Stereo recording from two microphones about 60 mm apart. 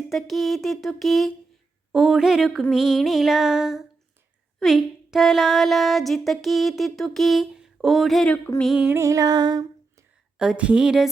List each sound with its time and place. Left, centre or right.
0.1 s speech: centre
1.9 s speech: centre
9.0 s music: right
10.3 s speech: centre